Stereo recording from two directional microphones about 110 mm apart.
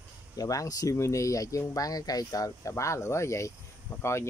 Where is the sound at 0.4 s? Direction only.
30° left (ahead or behind).